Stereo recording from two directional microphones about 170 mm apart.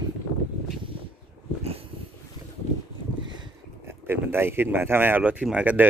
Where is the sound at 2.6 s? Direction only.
40° left (ahead or behind).